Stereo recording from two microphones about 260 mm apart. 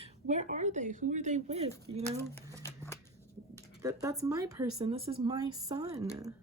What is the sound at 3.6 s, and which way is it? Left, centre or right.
Speech, centre.